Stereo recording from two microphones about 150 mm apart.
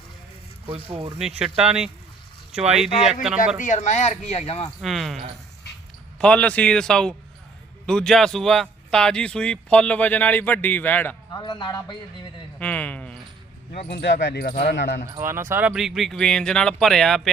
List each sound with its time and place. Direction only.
1.2 s speech: 5° right (ahead or behind)
3.6 s speech: 55° left (ahead or behind)
4.8 s speech: centre (ahead or behind)
11.3 s speech: 30° left (ahead or behind)
12.5 s speech: 10° left (ahead or behind)
13.9 s speech: 90° left
15.2 s speech: 15° right (ahead or behind); by 17.2 s centre (ahead or behind)